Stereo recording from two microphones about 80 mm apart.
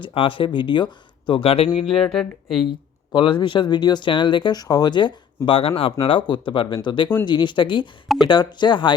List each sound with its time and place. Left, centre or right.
0.0 s speech: left
1.7 s speech: centre
2.6 s speech: left
4.5 s speech: left
8.0 s speech: centre
8.3 s speech: left